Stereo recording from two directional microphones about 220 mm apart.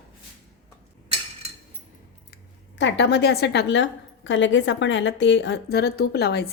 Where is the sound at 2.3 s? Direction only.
55° left (ahead or behind).